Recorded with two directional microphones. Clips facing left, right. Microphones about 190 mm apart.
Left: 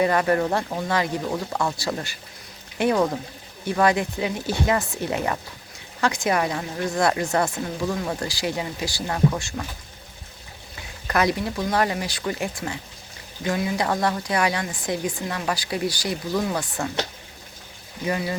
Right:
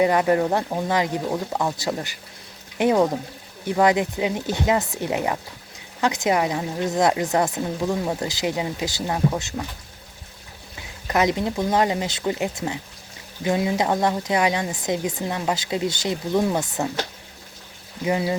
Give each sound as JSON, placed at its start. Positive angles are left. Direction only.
{"t": 0.0, "sound": "a woman's voice", "side_deg": -15}
{"t": 11.1, "sound": "a woman's voice", "side_deg": -20}
{"t": 18.0, "sound": "a woman's voice", "side_deg": -20}